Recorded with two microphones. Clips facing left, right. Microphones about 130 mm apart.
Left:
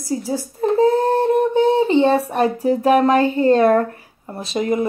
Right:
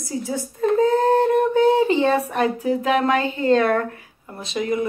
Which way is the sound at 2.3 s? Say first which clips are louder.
Left 3 dB; 40° left (ahead or behind).